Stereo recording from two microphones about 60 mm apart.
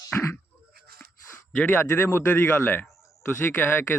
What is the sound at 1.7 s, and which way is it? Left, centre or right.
Speech, left.